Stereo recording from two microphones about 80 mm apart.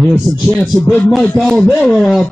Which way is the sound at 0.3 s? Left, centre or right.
Right.